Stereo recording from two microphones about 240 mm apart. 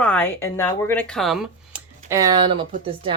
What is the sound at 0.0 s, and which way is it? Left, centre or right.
Speech, centre.